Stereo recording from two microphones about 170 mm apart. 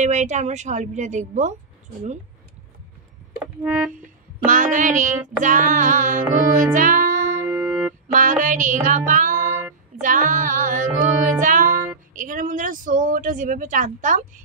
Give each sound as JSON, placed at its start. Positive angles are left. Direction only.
{"t": 0.0, "sound": "speech", "side_deg": -45}
{"t": 3.6, "sound": "music", "side_deg": -5}
{"t": 4.5, "sound": "speech", "side_deg": -50}
{"t": 6.3, "sound": "music", "side_deg": -50}
{"t": 7.6, "sound": "music", "side_deg": 0}
{"t": 8.1, "sound": "music", "side_deg": -50}
{"t": 8.8, "sound": "child singing", "side_deg": -50}
{"t": 10.0, "sound": "speech", "side_deg": -50}
{"t": 11.2, "sound": "music", "side_deg": -50}
{"t": 12.1, "sound": "speech", "side_deg": -50}